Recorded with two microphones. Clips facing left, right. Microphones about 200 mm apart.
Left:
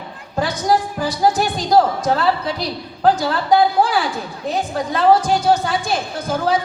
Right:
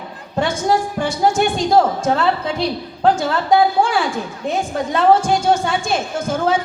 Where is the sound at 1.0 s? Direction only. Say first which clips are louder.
Right 2 dB; 35° left (ahead or behind).